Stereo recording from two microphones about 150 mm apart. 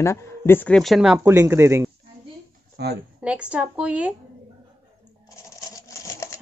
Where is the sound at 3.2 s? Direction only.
10° right (ahead or behind).